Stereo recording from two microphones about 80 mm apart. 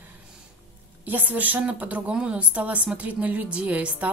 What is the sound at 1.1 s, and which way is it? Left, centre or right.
Speech, right.